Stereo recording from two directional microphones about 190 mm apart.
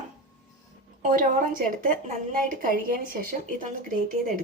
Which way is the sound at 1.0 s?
45° right (ahead or behind).